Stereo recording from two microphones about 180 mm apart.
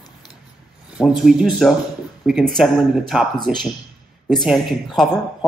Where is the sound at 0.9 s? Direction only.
Centre (ahead or behind).